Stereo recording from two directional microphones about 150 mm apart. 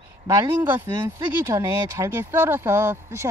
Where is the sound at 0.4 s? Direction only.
20° right (ahead or behind).